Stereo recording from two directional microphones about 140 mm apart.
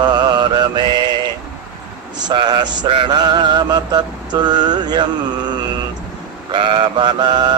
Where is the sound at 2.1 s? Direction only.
30° right (ahead or behind).